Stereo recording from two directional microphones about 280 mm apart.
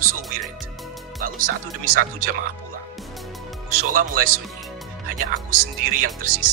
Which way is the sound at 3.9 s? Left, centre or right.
Right.